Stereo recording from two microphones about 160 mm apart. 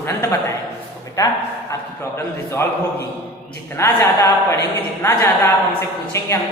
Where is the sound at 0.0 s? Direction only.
15° left (ahead or behind).